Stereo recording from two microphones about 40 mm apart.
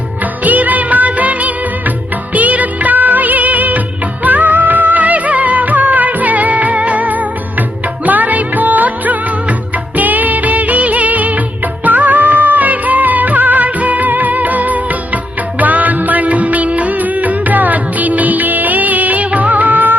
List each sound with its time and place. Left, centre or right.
0.4 s music of bollywood: right
8.0 s music: right
10.0 s music of bollywood: right
15.6 s music: right